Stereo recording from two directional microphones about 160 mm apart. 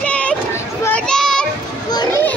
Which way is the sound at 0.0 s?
5° left (ahead or behind).